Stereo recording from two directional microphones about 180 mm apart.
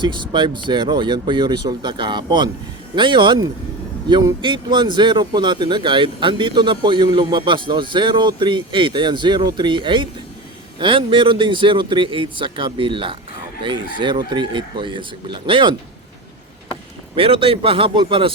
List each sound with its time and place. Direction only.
0.0 s speech: 25° right (ahead or behind)
17.2 s speech: 30° right (ahead or behind)